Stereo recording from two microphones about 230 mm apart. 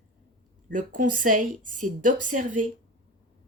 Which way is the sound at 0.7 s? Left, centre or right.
Right.